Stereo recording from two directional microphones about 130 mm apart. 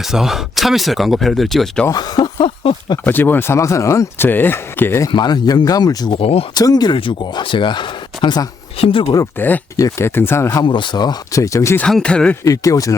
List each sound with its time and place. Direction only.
0.0 s speech: 5° right (ahead or behind)
1.9 s speech: 30° left (ahead or behind)
3.0 s speech: 15° left (ahead or behind)
5.1 s speech: 35° left (ahead or behind)
6.1 s speech: 50° left (ahead or behind)
6.5 s speech: 30° left (ahead or behind)
9.4 s speech: 15° left (ahead or behind)
10.6 s speech: 35° left (ahead or behind)
11.8 s speech: 5° left (ahead or behind)
12.5 s speech: 25° left (ahead or behind)